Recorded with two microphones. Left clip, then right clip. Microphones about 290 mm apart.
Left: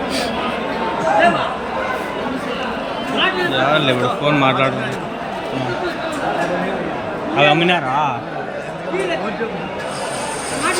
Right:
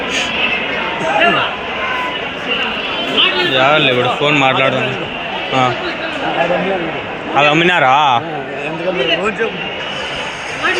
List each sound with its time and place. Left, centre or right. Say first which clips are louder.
3.2 s a man's voice: right 5 dB; centre
7.3 s a man's voice: right 3 dB; centre
7.9 s a man's voice: right 7 dB; right